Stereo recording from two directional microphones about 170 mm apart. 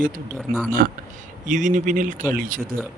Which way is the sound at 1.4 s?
45° right (ahead or behind).